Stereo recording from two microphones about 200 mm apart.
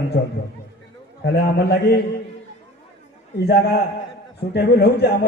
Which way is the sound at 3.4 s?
55° left (ahead or behind).